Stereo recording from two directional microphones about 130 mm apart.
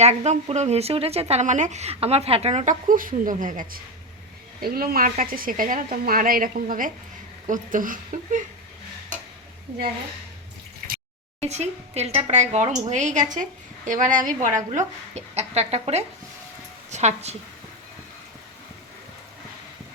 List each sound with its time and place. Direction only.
0.0 s speech: 60° right (ahead or behind); by 3.8 s 90° right
5.0 s a woman's voice: 90° right
11.3 s a woman's voice: 60° right (ahead or behind)